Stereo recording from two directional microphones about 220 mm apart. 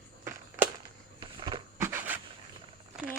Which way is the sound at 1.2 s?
20° right (ahead or behind).